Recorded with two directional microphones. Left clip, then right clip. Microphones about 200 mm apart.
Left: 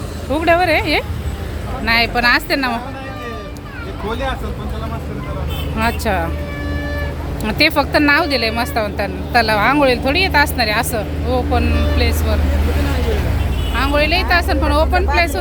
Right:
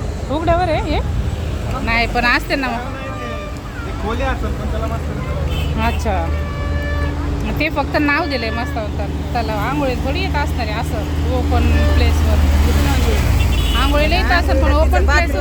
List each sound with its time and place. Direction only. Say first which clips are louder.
0.3 s speech: left 3 dB; 15° left (ahead or behind)
5.8 s speech: left 3 dB; 15° left (ahead or behind)
7.6 s speech: left 4 dB; 15° left (ahead or behind)
8.7 s speech: left 5 dB; 35° left (ahead or behind)
11.5 s speech: left 1 dB; 10° left (ahead or behind)
13.7 s speech: left 2 dB; 10° left (ahead or behind)